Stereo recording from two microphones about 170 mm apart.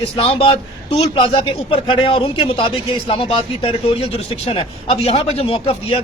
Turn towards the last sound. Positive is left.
turn(degrees=35)  # may be behind; listen again after turning